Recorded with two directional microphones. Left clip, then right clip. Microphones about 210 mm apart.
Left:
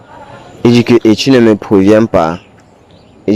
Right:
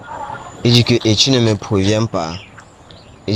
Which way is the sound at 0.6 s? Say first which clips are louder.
Left 6 dB; 35° left (ahead or behind).